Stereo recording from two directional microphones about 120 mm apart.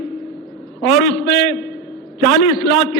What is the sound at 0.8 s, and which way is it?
A man's voice, 5° left (ahead or behind).